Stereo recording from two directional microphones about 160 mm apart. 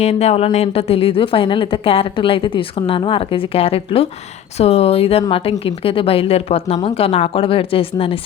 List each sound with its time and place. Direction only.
0.0 s speech: 40° left (ahead or behind)